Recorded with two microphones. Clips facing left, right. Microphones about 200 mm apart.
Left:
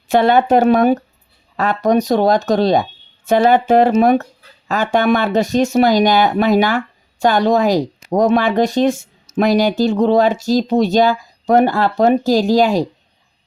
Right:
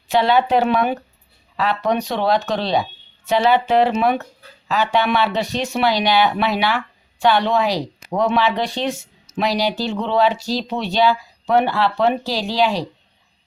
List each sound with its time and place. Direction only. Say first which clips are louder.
0.1 s speech: left 4 dB; 50° left (ahead or behind)